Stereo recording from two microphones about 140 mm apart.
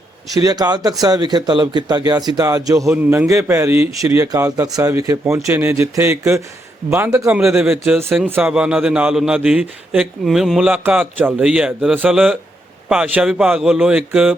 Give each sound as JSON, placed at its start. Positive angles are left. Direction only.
{"t": 0.4, "sound": "speech", "side_deg": -30}
{"t": 2.9, "sound": "a man's voice", "side_deg": -10}